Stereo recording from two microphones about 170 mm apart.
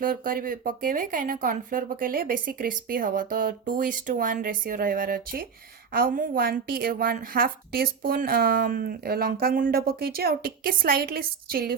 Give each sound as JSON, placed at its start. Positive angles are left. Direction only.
{"t": 0.0, "sound": "a woman's voice", "side_deg": -55}